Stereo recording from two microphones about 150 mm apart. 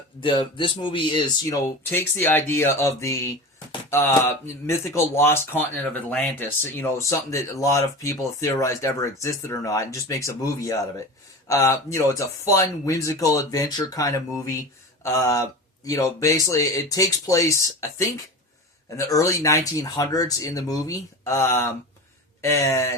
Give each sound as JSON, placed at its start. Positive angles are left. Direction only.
{"t": 0.2, "sound": "speech", "side_deg": 35}
{"t": 1.9, "sound": "speech", "side_deg": 15}